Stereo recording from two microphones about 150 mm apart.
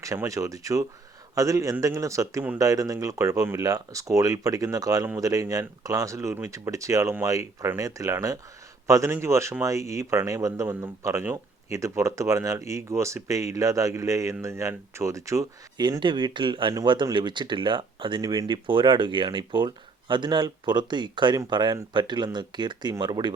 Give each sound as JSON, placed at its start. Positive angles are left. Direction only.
{"t": 0.0, "sound": "speech", "side_deg": -20}